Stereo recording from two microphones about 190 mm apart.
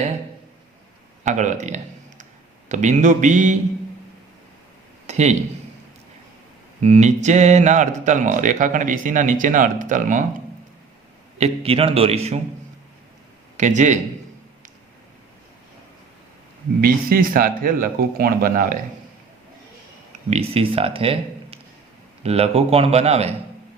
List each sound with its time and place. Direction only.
1.2 s speech: 40° right (ahead or behind)
5.0 s speech: 35° right (ahead or behind)
6.8 s speech: 35° right (ahead or behind)
11.3 s speech: 35° right (ahead or behind)
13.6 s speech: 40° right (ahead or behind)
16.8 s speech: 50° right (ahead or behind)
20.3 s speech: 30° right (ahead or behind)